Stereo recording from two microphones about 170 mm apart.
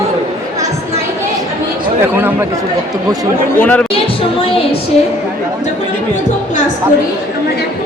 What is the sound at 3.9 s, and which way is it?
Speech, 35° left (ahead or behind).